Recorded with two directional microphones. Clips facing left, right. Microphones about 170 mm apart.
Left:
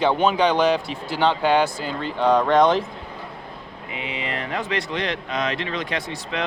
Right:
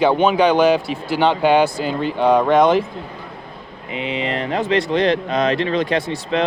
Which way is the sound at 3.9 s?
25° right (ahead or behind).